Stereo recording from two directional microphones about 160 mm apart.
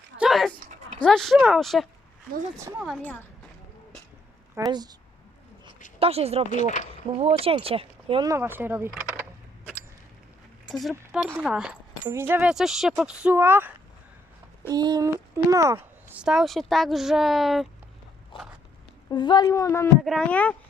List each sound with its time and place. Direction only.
0.2 s a sound: centre (ahead or behind)
0.9 s speech: 5° left (ahead or behind)
4.5 s speech: 25° right (ahead or behind)
6.0 s speech: 40° right (ahead or behind)
6.5 s speech: 50° left (ahead or behind)
7.2 s speech: 35° right (ahead or behind)
8.2 s speech: 15° right (ahead or behind)
10.7 s speech: centre (ahead or behind)
12.0 s speech: 15° right (ahead or behind)
14.7 s speech: 25° right (ahead or behind); by 17.7 s centre (ahead or behind)
18.3 s walk: 30° left (ahead or behind)
19.1 s speech: 25° left (ahead or behind)
20.1 s speech: 5° left (ahead or behind)